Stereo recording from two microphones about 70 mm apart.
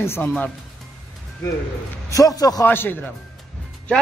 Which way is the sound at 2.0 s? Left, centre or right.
Left.